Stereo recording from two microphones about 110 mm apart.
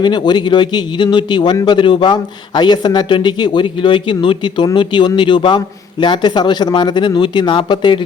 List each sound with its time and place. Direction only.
0.0 s a man's voice: 45° left (ahead or behind)